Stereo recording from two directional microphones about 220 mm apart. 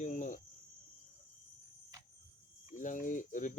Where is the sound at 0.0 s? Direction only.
35° left (ahead or behind).